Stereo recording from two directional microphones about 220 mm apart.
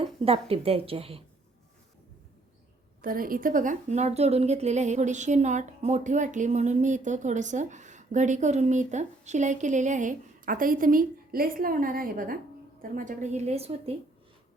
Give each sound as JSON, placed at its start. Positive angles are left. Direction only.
{"t": 0.0, "sound": "a woman's voice", "side_deg": -25}
{"t": 3.0, "sound": "a woman's voice", "side_deg": -40}